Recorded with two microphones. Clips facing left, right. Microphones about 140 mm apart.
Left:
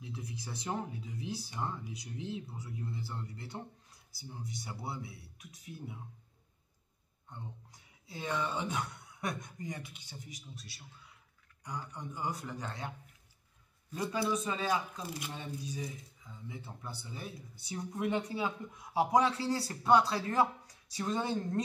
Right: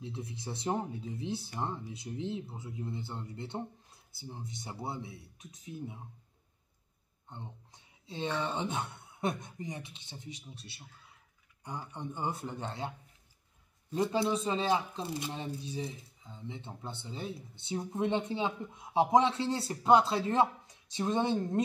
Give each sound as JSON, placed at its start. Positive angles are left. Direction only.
{"t": 0.0, "sound": "speech", "side_deg": -25}
{"t": 7.2, "sound": "speech", "side_deg": -25}
{"t": 13.9, "sound": "speech", "side_deg": -25}